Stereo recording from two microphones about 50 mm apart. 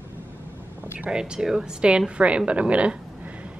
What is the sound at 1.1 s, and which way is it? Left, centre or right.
A woman's voice, centre.